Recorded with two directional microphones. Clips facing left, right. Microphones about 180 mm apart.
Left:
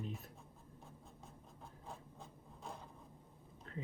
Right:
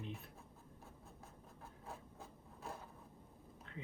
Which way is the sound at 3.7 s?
40° left (ahead or behind).